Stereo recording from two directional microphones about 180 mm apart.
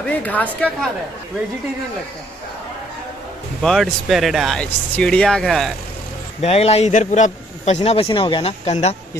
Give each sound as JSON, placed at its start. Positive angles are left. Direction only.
{"t": 0.2, "sound": "a woman's voice", "side_deg": 10}
{"t": 3.6, "sound": "speech", "side_deg": 0}
{"t": 6.4, "sound": "a man's voice", "side_deg": 35}